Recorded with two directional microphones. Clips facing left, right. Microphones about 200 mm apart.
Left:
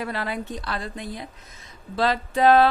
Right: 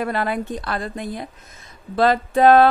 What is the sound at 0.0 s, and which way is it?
A woman's voice, 55° right (ahead or behind).